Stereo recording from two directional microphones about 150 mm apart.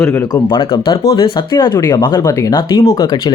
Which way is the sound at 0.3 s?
30° left (ahead or behind).